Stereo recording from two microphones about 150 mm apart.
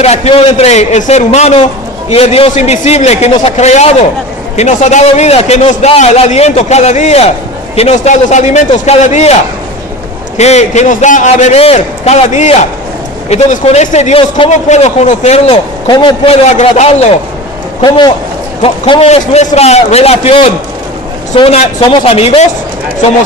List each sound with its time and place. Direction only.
0.0 s a man's voice: 40° left (ahead or behind)
10.3 s a man's voice: 45° left (ahead or behind)
14.5 s a man's voice: 50° left (ahead or behind)
15.9 s a man's voice: 30° left (ahead or behind); by 17.1 s 50° left (ahead or behind)
17.8 s a man's voice: 30° left (ahead or behind)
18.6 s a man's voice: 40° left (ahead or behind)